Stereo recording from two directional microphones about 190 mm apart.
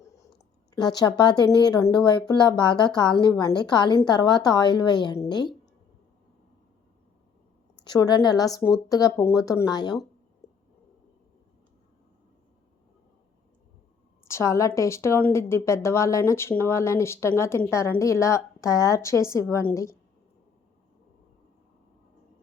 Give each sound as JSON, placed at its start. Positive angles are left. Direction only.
{"t": 0.8, "sound": "speech", "side_deg": 20}
{"t": 7.9, "sound": "speech", "side_deg": 20}
{"t": 14.3, "sound": "a woman's voice", "side_deg": 15}